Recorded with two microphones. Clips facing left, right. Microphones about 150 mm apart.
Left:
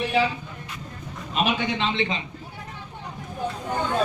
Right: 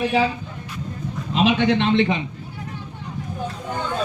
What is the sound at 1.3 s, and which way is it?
Speech, 85° right.